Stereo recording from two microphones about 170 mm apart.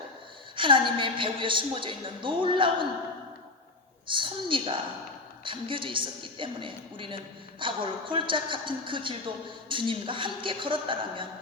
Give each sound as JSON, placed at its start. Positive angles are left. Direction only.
{"t": 0.5, "sound": "a woman's voice", "side_deg": -30}
{"t": 4.0, "sound": "a woman's voice", "side_deg": -30}